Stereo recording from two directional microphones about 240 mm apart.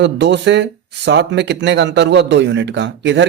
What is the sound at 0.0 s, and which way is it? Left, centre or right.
Speech, right.